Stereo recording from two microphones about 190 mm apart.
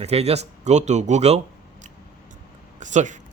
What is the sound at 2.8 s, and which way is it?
Speech, 40° right (ahead or behind).